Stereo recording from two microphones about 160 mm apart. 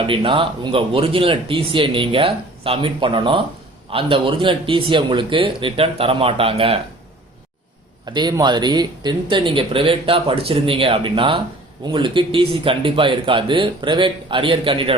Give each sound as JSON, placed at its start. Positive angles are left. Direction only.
{"t": 0.0, "sound": "speech", "side_deg": -35}
{"t": 8.0, "sound": "speech", "side_deg": -25}